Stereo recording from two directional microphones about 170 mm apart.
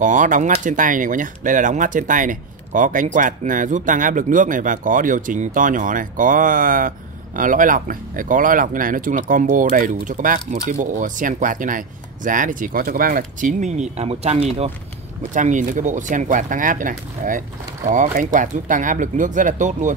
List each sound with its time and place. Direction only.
0.0 s speech: 50° right (ahead or behind)
15.3 s speech: 50° right (ahead or behind)